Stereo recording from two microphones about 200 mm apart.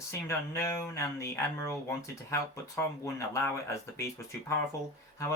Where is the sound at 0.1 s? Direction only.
15° left (ahead or behind).